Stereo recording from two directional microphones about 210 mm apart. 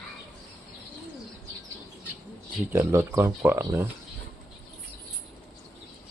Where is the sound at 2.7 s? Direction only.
10° right (ahead or behind).